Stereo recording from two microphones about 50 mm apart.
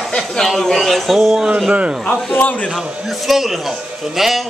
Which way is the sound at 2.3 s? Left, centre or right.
Left.